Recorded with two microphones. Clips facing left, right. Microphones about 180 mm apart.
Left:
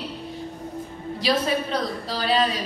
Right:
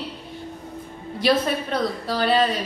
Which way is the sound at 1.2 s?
55° right (ahead or behind).